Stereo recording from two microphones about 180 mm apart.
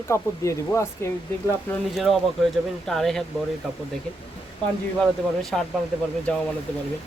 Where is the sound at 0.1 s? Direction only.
15° left (ahead or behind).